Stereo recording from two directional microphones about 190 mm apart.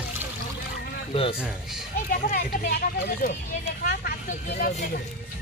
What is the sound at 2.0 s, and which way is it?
Speech, 50° left (ahead or behind).